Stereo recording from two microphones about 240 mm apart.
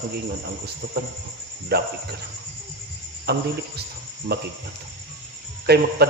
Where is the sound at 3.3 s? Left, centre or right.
Right.